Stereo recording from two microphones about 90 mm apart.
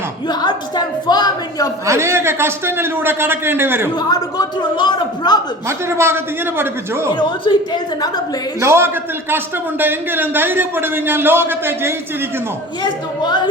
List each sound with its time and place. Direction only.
0.3 s a sound: 50° left (ahead or behind)
1.9 s a man's voice: 30° right (ahead or behind)
4.1 s speech: 50° left (ahead or behind)
5.6 s a man's voice: 30° right (ahead or behind)
7.1 s a woman's voice: 60° left (ahead or behind)
8.6 s a man's voice: 30° right (ahead or behind)
12.8 s a woman's voice: 55° left (ahead or behind)